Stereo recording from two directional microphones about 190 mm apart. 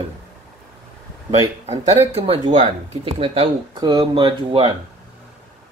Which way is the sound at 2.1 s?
30° right (ahead or behind).